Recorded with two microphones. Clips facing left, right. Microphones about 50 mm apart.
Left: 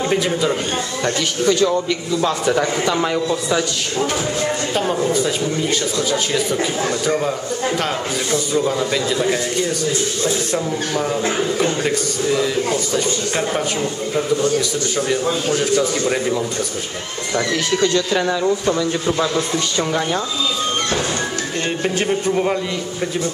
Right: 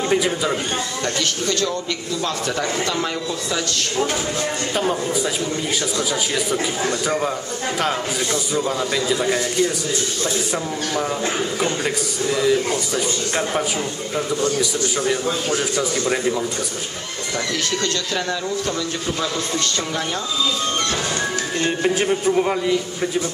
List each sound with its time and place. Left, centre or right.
0.1 s a man's voice: centre
1.0 s speech: centre
5.9 s a man's voice: centre
8.5 s a man's voice: centre
11.6 s a man's voice: centre
15.0 s a man's voice: centre
17.6 s speech: centre
21.6 s a man's voice: centre